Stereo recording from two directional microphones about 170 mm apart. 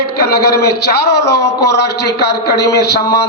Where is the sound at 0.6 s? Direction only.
70° left (ahead or behind).